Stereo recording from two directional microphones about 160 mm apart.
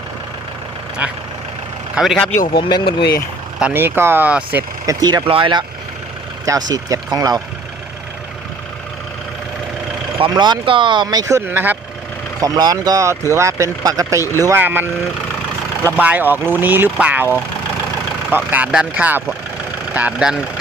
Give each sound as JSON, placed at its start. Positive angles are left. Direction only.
{"t": 2.0, "sound": "speech", "side_deg": 0}
{"t": 2.5, "sound": "speech", "side_deg": 30}
{"t": 3.6, "sound": "speech", "side_deg": -15}
{"t": 4.9, "sound": "speech", "side_deg": -25}
{"t": 10.2, "sound": "speech", "side_deg": -30}
{"t": 12.4, "sound": "speech", "side_deg": -25}
{"t": 15.9, "sound": "speech", "side_deg": -10}